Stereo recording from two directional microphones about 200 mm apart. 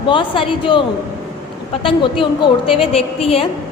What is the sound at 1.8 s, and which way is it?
A woman's voice, 25° left (ahead or behind).